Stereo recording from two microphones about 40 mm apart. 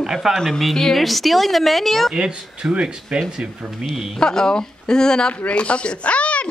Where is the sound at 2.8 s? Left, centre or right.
Right; by 4.2 s centre.